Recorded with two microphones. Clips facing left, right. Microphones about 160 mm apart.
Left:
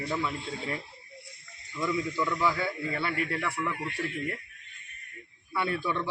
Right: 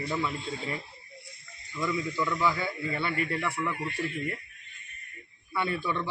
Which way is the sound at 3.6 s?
15° right (ahead or behind).